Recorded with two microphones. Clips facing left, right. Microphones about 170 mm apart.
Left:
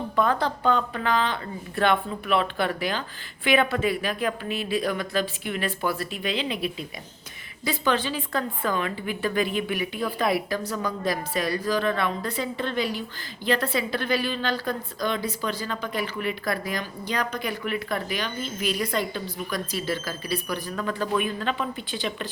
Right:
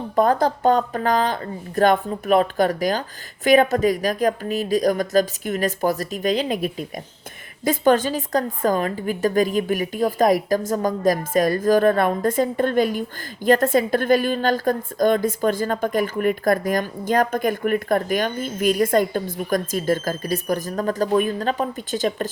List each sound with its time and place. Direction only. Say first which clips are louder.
0.2 s a woman's voice: right 6 dB; 40° right (ahead or behind)